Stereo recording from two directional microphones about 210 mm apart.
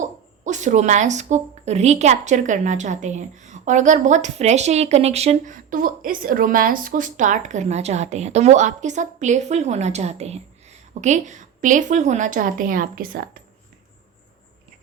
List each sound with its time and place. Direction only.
0.0 s speech: 35° right (ahead or behind)